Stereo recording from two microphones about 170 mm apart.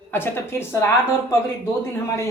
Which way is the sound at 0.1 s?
15° left (ahead or behind).